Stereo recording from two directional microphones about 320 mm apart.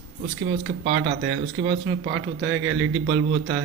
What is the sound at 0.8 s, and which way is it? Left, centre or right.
Speech, right.